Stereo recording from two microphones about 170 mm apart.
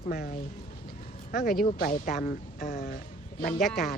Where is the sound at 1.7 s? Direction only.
55° left (ahead or behind).